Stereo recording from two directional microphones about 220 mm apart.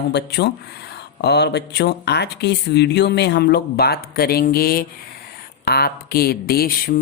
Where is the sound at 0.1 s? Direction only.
50° left (ahead or behind).